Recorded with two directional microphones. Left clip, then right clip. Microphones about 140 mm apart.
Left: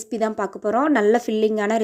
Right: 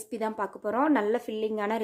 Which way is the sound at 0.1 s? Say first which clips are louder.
Left 8 dB; 25° left (ahead or behind).